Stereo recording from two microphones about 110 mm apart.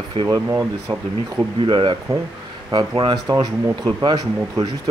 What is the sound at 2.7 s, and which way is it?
Speech, 45° right (ahead or behind).